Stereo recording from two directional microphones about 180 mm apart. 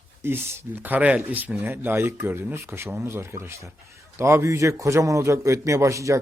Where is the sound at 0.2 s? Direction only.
15° right (ahead or behind).